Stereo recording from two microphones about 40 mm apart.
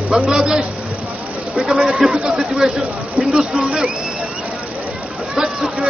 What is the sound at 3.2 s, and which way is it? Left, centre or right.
Speech, centre.